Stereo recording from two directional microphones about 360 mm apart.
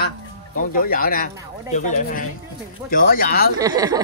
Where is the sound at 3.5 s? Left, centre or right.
Centre.